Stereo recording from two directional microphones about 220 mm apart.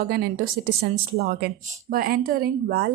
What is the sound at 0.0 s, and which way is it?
Speech, 45° right (ahead or behind).